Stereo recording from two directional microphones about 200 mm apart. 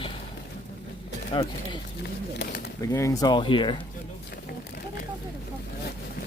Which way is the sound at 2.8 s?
15° left (ahead or behind).